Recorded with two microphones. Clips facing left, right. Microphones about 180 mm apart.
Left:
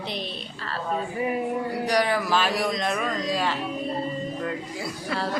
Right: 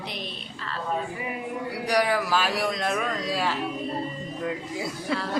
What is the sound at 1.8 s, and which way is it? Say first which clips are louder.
Speech: right 1 dB; 10° right (ahead or behind).